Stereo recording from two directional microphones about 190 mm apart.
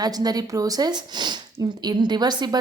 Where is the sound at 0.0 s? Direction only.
20° right (ahead or behind).